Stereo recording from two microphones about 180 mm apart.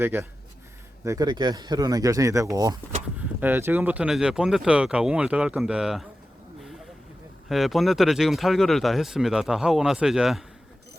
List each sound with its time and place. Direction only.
0.0 s speech: 10° right (ahead or behind)
7.4 s speech: centre (ahead or behind)